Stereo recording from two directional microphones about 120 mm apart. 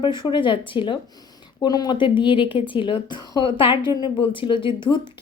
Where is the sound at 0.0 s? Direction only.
40° left (ahead or behind).